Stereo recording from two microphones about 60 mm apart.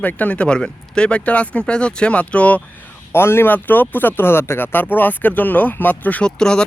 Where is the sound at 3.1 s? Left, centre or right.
Left.